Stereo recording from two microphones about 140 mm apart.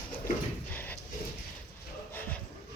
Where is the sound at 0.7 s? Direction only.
15° left (ahead or behind).